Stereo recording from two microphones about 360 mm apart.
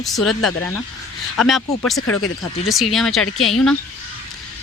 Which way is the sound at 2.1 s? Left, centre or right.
Left.